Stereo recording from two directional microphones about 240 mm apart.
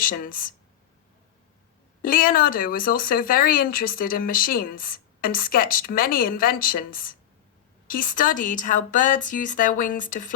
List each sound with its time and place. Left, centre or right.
0.0 s speech: left
2.0 s speech: left